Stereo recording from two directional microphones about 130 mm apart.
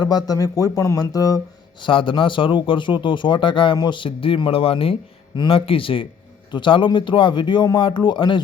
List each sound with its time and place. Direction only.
0.0 s speech: 30° left (ahead or behind)
1.8 s a man's voice: 40° left (ahead or behind)